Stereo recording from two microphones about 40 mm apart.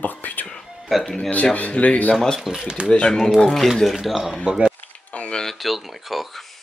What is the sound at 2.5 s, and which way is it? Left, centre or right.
Speech, centre.